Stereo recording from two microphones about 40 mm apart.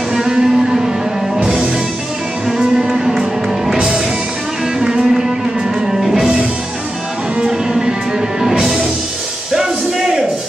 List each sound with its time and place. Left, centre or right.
0.1 s music: centre
2.9 s music: centre
4.7 s music: centre
7.4 s music: centre